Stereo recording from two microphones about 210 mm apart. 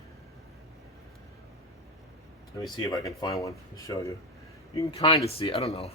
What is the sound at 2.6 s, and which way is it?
Speech, 15° left (ahead or behind).